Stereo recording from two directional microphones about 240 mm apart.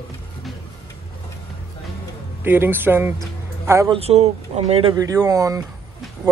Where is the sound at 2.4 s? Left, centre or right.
Centre.